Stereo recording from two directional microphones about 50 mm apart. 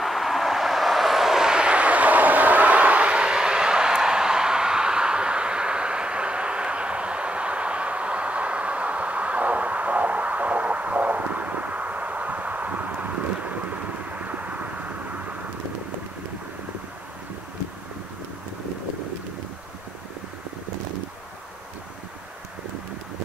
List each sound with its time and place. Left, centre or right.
0.0 s vehicle: centre; by 15.3 s right